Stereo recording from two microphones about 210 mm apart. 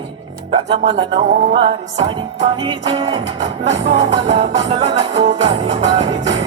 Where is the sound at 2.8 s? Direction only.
25° right (ahead or behind).